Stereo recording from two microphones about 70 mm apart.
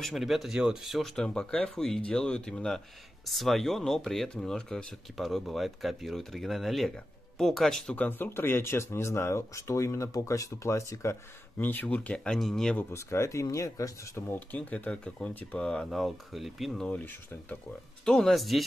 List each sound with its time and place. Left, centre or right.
0.0 s speech: centre
1.1 s speech: centre
7.9 s speech: left
11.5 s speech: left
12.4 s speech: centre
12.9 s speech: left
14.5 s speech: left; by 16.8 s centre
17.0 s speech: left
18.0 s speech: centre